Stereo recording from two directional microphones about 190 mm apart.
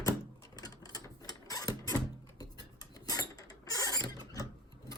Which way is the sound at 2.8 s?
20° left (ahead or behind).